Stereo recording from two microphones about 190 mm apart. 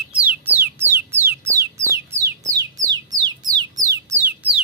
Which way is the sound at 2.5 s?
20° right (ahead or behind).